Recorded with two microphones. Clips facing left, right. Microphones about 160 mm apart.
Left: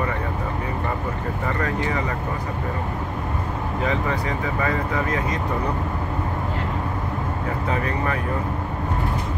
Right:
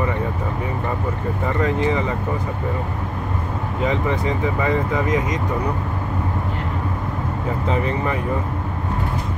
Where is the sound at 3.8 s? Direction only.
20° right (ahead or behind).